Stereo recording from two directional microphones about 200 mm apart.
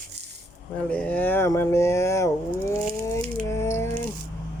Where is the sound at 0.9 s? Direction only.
5° left (ahead or behind).